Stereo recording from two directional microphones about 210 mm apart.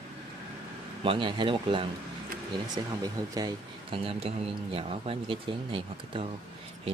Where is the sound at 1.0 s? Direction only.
25° right (ahead or behind).